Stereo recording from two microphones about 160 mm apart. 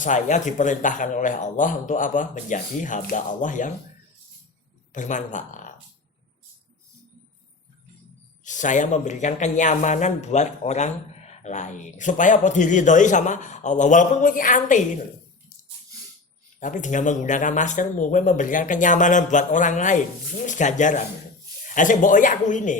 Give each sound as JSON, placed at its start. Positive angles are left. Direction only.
{"t": 0.0, "sound": "speech", "side_deg": 50}
{"t": 4.9, "sound": "speech", "side_deg": 50}
{"t": 8.4, "sound": "speech", "side_deg": 50}
{"t": 16.6, "sound": "speech", "side_deg": 50}